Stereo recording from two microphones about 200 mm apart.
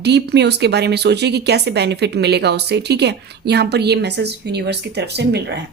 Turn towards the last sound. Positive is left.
turn(degrees=-55)  # may be behind; listen again after turning